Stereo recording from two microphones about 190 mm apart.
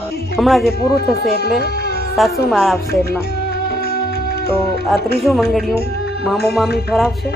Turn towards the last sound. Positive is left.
turn(degrees=0)  # may be behind; listen again after turning